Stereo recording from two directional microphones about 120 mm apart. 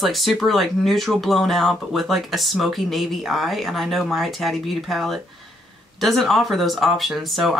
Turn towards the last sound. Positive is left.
turn(degrees=0)  # may be behind; listen again after turning